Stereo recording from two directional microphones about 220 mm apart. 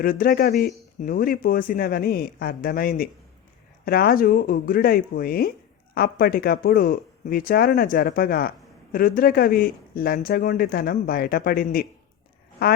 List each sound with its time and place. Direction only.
0.0 s speech: 40° left (ahead or behind)